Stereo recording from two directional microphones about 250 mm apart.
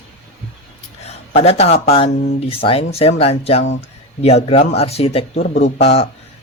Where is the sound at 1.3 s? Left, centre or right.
Left.